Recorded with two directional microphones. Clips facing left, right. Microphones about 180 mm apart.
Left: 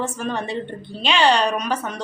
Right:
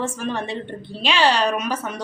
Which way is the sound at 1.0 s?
5° right (ahead or behind).